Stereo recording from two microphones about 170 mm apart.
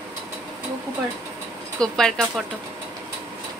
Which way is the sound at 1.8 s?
5° left (ahead or behind).